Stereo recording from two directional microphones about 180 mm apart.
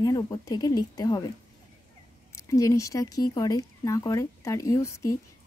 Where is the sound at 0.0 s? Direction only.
20° left (ahead or behind).